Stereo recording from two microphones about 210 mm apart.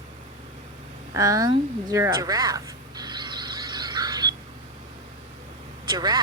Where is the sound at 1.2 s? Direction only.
15° right (ahead or behind).